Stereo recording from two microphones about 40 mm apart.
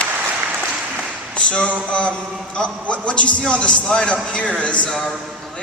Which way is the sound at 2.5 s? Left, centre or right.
Left.